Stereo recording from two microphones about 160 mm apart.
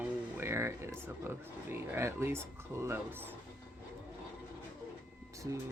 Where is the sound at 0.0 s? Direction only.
15° right (ahead or behind).